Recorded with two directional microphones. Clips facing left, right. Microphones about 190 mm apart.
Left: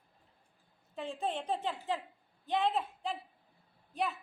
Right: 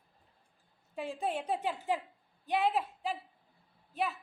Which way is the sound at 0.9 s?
10° right (ahead or behind).